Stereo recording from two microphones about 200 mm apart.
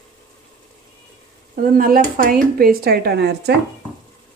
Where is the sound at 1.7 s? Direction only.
45° right (ahead or behind).